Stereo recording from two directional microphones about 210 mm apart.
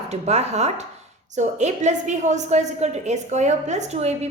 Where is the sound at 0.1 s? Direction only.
30° right (ahead or behind).